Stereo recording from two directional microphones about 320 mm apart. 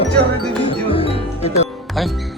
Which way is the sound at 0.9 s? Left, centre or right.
Centre.